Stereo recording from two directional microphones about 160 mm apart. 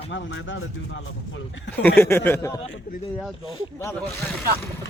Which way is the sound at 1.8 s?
10° left (ahead or behind).